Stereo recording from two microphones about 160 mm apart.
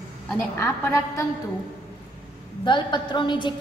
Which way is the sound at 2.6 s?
30° left (ahead or behind).